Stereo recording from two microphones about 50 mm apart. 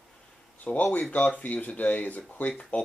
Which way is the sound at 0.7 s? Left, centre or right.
Centre.